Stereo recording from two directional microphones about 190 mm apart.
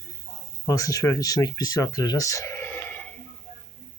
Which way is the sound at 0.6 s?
15° left (ahead or behind).